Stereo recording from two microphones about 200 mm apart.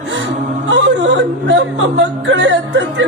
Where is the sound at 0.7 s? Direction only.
60° right (ahead or behind).